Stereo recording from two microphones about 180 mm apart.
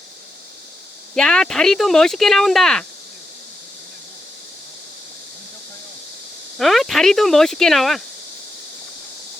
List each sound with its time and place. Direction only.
1.1 s speech: 5° left (ahead or behind)
6.6 s speech: centre (ahead or behind)